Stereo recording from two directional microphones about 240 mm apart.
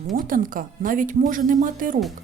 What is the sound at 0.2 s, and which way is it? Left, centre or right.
Speech, right.